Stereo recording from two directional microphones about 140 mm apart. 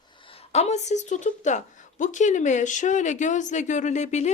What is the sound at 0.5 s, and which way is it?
A woman's voice, 50° left (ahead or behind).